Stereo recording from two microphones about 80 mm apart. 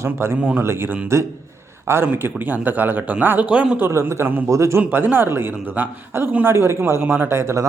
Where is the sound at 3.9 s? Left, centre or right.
Right.